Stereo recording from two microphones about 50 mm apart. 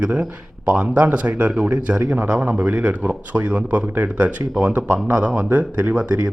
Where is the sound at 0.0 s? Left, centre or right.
Right.